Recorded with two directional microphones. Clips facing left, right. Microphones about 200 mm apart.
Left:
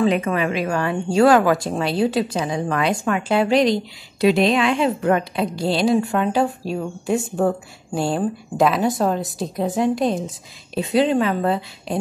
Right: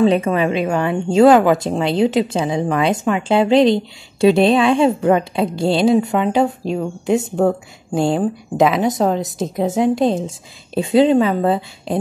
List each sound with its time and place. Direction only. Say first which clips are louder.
0.0 s a woman's voice: right 4 dB; 25° right (ahead or behind)